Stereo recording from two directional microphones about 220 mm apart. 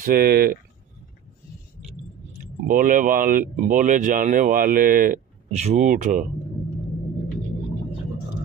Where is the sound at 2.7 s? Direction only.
40° right (ahead or behind).